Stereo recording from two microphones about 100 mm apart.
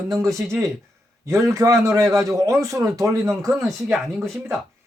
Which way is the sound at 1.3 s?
30° right (ahead or behind).